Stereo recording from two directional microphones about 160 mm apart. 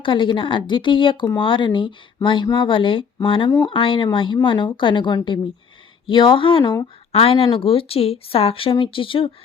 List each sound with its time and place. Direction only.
0.0 s a woman's voice: 30° left (ahead or behind)